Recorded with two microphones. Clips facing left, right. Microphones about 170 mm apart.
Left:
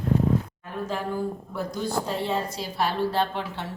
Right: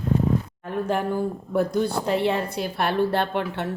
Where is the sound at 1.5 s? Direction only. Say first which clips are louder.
Right 7 dB; 60° right (ahead or behind).